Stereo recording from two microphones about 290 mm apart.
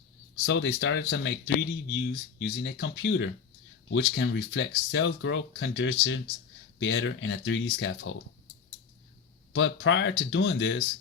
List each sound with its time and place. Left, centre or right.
0.4 s speech: left
9.6 s speech: left